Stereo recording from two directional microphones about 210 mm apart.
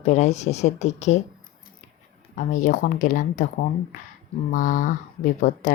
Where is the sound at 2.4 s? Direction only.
35° left (ahead or behind).